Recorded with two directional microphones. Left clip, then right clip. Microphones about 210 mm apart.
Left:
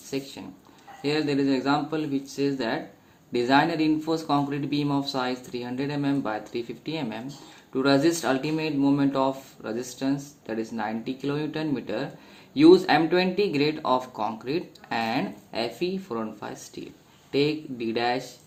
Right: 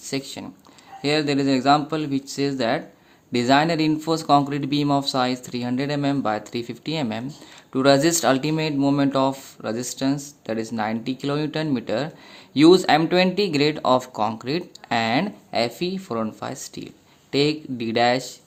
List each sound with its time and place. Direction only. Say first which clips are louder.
0.0 s speech: right 4 dB; 55° right (ahead or behind)